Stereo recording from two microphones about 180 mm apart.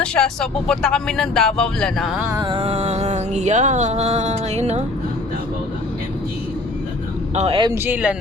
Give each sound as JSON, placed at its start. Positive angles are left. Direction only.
{"t": 0.0, "sound": "speech", "side_deg": 5}
{"t": 2.3, "sound": "music", "side_deg": -25}
{"t": 7.3, "sound": "music", "side_deg": -35}
{"t": 7.7, "sound": "speech", "side_deg": -10}